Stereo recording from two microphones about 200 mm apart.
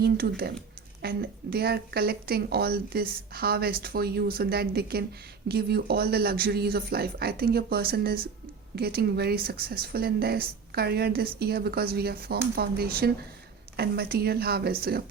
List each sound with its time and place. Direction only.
0.0 s speech: 50° right (ahead or behind)